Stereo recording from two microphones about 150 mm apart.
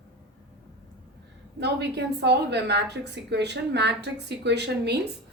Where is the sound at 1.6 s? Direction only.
90° right.